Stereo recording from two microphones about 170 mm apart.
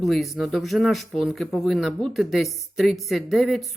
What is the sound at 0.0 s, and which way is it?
Speech, centre (ahead or behind).